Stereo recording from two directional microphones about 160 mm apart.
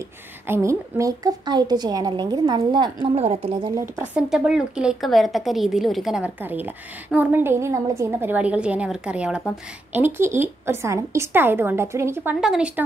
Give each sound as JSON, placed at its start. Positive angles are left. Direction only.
{"t": 0.5, "sound": "a woman's voice", "side_deg": -20}
{"t": 3.2, "sound": "a woman's voice", "side_deg": -40}
{"t": 3.7, "sound": "a woman's voice", "side_deg": -15}